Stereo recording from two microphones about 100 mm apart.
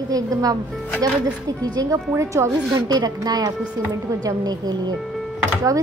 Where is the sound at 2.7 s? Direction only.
40° right (ahead or behind).